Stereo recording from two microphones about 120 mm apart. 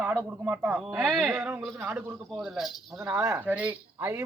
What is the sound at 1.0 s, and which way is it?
Speech, 5° left (ahead or behind).